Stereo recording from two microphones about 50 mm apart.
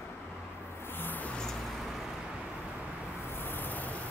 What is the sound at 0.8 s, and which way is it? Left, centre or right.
Music, left.